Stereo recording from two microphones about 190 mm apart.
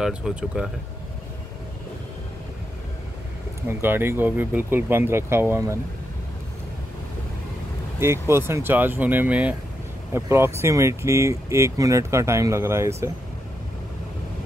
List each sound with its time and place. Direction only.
0.0 s speech: 5° right (ahead or behind)
3.6 s speech: 10° right (ahead or behind)
8.0 s speech: 15° right (ahead or behind)